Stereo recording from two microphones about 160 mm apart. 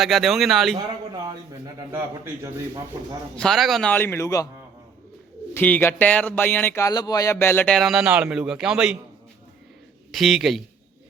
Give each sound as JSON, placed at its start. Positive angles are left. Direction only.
{"t": 0.0, "sound": "speech", "side_deg": 0}
{"t": 0.8, "sound": "a man's voice", "side_deg": -25}
{"t": 3.3, "sound": "speech", "side_deg": 5}
{"t": 5.5, "sound": "speech", "side_deg": 10}
{"t": 7.8, "sound": "speech", "side_deg": -5}
{"t": 10.1, "sound": "speech", "side_deg": 0}